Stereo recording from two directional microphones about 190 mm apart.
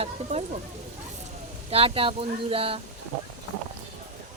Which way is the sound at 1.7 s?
30° right (ahead or behind).